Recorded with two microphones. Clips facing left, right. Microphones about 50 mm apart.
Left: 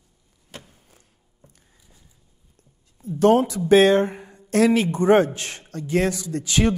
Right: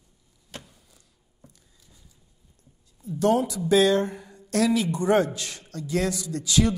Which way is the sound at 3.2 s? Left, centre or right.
Left.